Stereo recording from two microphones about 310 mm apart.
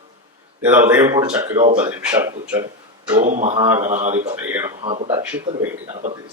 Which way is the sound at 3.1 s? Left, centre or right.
Right.